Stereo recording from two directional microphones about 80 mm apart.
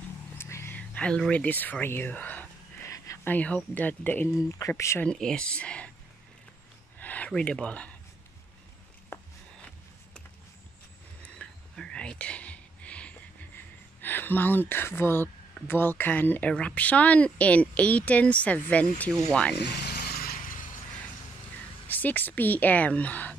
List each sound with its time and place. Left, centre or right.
0.4 s a sound: left
0.7 s a sound: centre
1.3 s speech: centre
2.8 s a sound: left
3.3 s speech: centre
4.5 s speech: left
5.0 s speech: centre
7.0 s speech: centre
9.1 s a sound: left
11.4 s whispering: centre
14.0 s speech: left
21.8 s speech: left